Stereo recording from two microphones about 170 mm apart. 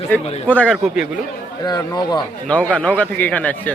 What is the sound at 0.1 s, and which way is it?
Speech, 10° left (ahead or behind).